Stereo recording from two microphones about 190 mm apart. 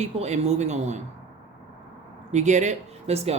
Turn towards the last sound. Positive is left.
turn(degrees=-35)  # may be behind; listen again after turning